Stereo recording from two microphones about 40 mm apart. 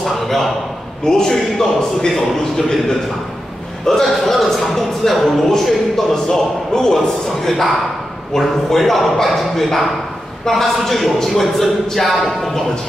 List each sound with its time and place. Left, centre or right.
0.0 s a sound: centre
1.0 s a man's voice: centre
4.0 s a man's voice: centre